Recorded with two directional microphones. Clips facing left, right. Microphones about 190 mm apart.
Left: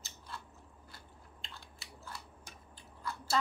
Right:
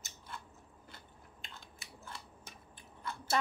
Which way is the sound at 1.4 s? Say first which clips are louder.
Even; 20° right (ahead or behind).